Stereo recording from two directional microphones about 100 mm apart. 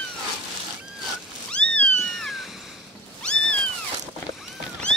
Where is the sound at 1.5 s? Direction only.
10° left (ahead or behind).